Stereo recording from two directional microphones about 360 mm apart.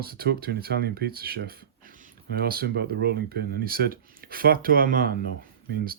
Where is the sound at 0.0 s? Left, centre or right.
Right.